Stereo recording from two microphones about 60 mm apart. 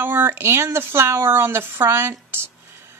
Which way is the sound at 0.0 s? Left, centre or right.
Right.